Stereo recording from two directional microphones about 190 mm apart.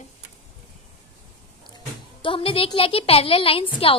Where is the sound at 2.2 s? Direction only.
30° left (ahead or behind).